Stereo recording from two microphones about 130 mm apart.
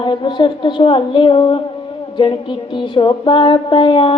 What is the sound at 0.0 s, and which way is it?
Speech, 40° left (ahead or behind).